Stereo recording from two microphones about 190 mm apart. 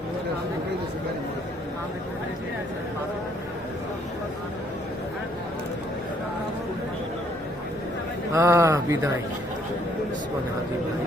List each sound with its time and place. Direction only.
8.3 s speech: 15° right (ahead or behind)